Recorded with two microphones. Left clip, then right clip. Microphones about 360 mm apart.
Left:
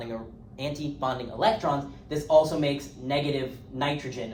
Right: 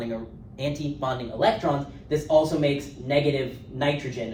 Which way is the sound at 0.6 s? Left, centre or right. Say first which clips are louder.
Right 2 dB; centre.